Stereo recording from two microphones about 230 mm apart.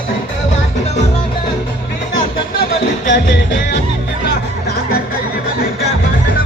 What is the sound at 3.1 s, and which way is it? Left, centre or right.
Music, left.